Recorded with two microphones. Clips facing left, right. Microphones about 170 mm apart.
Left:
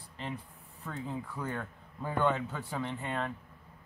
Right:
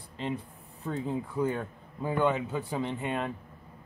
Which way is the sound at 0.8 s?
25° right (ahead or behind).